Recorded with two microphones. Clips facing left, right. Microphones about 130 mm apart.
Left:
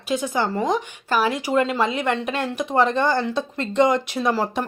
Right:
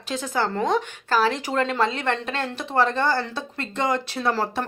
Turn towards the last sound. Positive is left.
turn(degrees=15)  # may be behind; listen again after turning